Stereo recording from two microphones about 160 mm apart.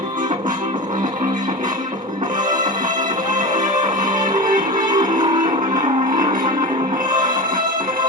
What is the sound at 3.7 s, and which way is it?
Music, 25° right (ahead or behind).